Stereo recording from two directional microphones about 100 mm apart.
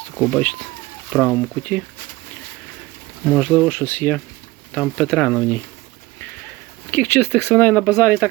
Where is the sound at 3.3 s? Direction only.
10° left (ahead or behind).